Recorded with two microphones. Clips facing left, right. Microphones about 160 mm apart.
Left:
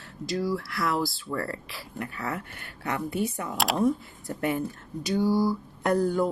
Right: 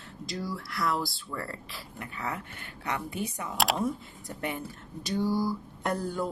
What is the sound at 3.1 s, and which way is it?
Speech, 45° left (ahead or behind).